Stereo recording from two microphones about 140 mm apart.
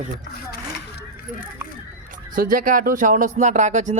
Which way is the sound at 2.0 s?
80° right.